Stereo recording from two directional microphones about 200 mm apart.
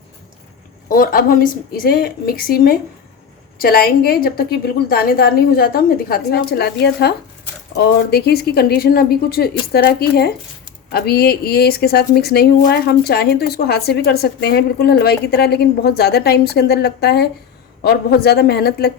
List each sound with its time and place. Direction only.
0.9 s speech: 45° left (ahead or behind)